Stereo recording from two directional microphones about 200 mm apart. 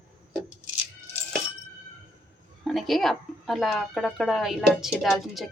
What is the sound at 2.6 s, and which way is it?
A woman's voice, centre (ahead or behind).